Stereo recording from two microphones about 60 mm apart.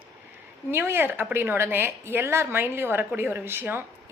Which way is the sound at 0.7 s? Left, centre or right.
Right.